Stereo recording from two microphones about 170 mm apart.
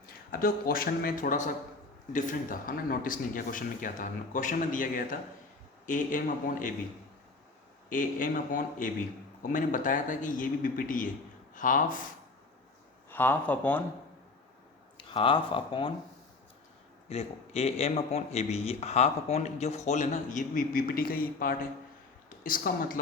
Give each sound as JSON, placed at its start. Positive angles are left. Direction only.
{"t": 0.3, "sound": "speech", "side_deg": 60}
{"t": 7.9, "sound": "speech", "side_deg": 50}
{"t": 13.1, "sound": "speech", "side_deg": 10}
{"t": 14.9, "sound": "speech", "side_deg": 30}
{"t": 17.1, "sound": "speech", "side_deg": 35}